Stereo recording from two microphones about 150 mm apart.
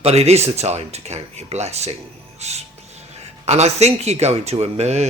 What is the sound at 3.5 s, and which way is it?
Speech, 45° right (ahead or behind).